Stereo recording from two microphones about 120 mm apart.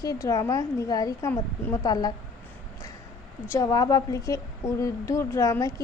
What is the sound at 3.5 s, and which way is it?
Speech, 30° left (ahead or behind).